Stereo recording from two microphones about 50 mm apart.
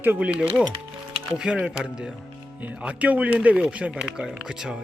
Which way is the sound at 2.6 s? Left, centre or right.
Right.